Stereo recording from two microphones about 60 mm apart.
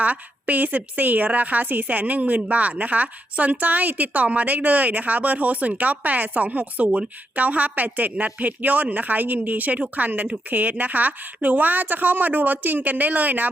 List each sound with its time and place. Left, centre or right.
0.0 s a woman's voice: right